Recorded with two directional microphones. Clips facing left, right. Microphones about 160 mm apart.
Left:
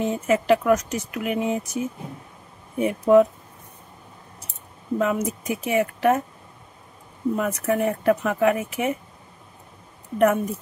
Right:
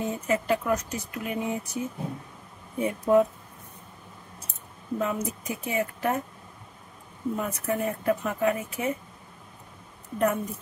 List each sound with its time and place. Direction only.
0.0 s speech: 85° left
2.8 s speech: 90° left
4.9 s speech: 80° left
7.3 s speech: 80° left
10.1 s speech: 85° left